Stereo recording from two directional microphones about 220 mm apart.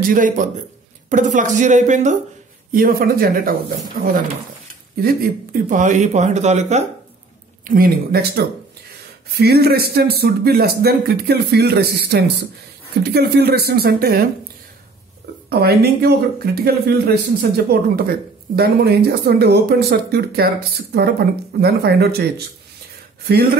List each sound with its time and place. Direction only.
0.0 s speech: 40° right (ahead or behind)
5.0 s speech: 40° right (ahead or behind)
7.6 s speech: 40° right (ahead or behind)
15.6 s speech: 45° right (ahead or behind)